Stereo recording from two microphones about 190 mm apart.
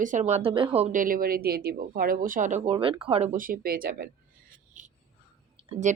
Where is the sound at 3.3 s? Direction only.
50° right (ahead or behind).